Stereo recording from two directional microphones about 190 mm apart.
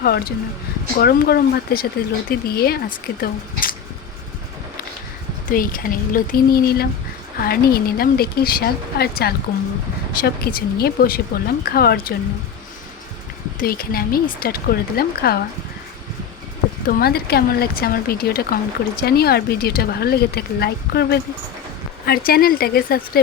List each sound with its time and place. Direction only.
0.0 s a woman's voice: 50° left (ahead or behind)
5.5 s a woman's voice: 45° left (ahead or behind)
13.6 s a woman's voice: 50° left (ahead or behind)
16.8 s a woman's voice: 55° left (ahead or behind)